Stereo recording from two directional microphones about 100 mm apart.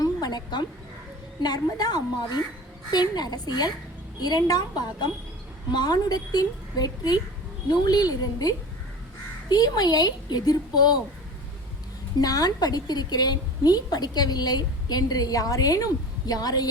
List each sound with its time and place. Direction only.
0.0 s a sound: 40° left (ahead or behind)
1.4 s a woman's voice: 45° left (ahead or behind)
12.2 s a woman's voice: 40° left (ahead or behind)